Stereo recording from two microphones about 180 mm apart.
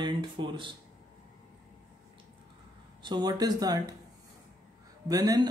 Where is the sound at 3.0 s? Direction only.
25° right (ahead or behind).